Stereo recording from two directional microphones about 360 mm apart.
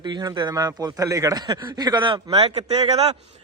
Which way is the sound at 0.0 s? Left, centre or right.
Centre.